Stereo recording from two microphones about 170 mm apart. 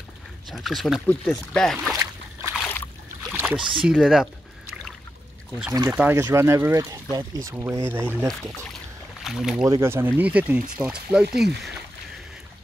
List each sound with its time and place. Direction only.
0.5 s speech: centre (ahead or behind)
3.3 s rowboat: 10° right (ahead or behind)
3.7 s pour: 5° right (ahead or behind)
5.7 s speech: 15° right (ahead or behind)
9.2 s speech: centre (ahead or behind)
9.7 s speech: 15° right (ahead or behind)